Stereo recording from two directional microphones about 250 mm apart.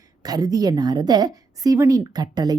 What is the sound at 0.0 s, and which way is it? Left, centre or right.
A woman's voice, centre.